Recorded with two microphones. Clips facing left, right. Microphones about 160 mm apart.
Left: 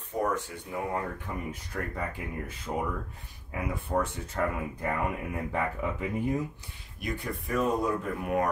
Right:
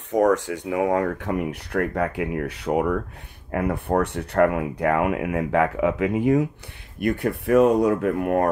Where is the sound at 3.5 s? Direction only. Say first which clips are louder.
Right 8 dB; 65° right (ahead or behind); by 6.5 s 85° right.